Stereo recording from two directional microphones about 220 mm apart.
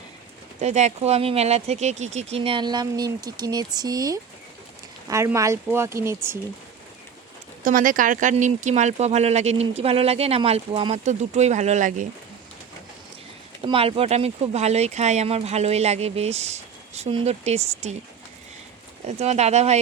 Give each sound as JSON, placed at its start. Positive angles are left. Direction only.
{"t": 0.6, "sound": "speech", "side_deg": -30}
{"t": 7.6, "sound": "speech", "side_deg": -40}
{"t": 13.6, "sound": "speech", "side_deg": -25}
{"t": 19.0, "sound": "speech", "side_deg": -30}